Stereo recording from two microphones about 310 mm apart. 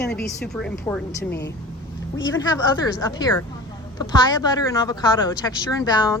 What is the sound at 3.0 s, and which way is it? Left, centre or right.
A woman's voice, centre.